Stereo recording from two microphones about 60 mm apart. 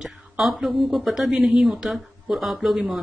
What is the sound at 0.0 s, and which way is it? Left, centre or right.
A woman's voice, centre.